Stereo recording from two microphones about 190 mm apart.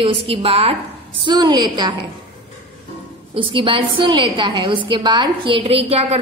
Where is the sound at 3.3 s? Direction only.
25° right (ahead or behind).